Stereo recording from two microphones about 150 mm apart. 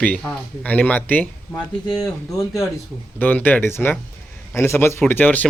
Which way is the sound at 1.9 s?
25° left (ahead or behind).